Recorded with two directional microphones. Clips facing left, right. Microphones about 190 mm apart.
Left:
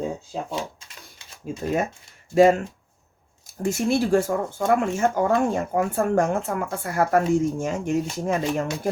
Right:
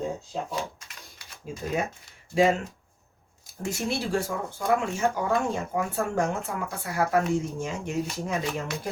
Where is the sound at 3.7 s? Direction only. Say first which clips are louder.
Left 8 dB; 50° left (ahead or behind).